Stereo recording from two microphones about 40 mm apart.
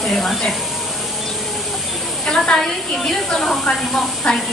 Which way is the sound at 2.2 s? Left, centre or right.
Centre.